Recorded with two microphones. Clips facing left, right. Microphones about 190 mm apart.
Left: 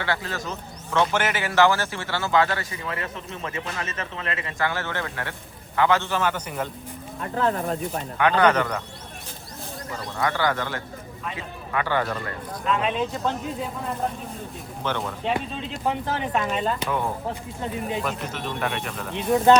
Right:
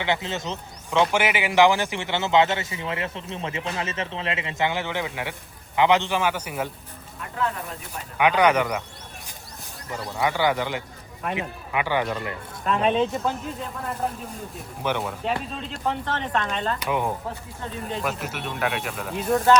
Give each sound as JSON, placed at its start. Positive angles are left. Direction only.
{"t": 0.0, "sound": "a man's voice", "side_deg": -20}
{"t": 7.2, "sound": "speech", "side_deg": 35}
{"t": 8.2, "sound": "a man's voice", "side_deg": -10}
{"t": 10.2, "sound": "a man's voice", "side_deg": -15}
{"t": 12.7, "sound": "speech", "side_deg": -45}
{"t": 14.8, "sound": "a man's voice", "side_deg": -10}
{"t": 15.2, "sound": "speech", "side_deg": 0}
{"t": 17.6, "sound": "speech", "side_deg": 15}
{"t": 17.8, "sound": "speech", "side_deg": 0}